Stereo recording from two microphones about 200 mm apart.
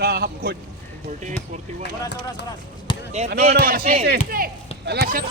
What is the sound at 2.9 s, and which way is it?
Basketball bounce, 25° left (ahead or behind).